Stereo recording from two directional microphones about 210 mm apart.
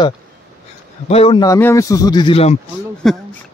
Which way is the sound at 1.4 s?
15° left (ahead or behind).